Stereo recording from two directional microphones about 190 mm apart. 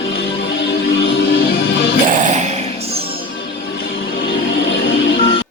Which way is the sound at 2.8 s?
55° left (ahead or behind).